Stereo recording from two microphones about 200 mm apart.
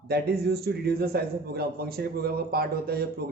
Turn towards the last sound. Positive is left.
turn(degrees=-50)  # may be behind; listen again after turning